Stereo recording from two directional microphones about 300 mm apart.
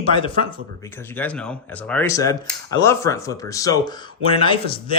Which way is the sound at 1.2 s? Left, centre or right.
Centre.